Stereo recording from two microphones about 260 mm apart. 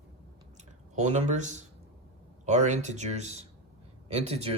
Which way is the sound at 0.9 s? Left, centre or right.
Right.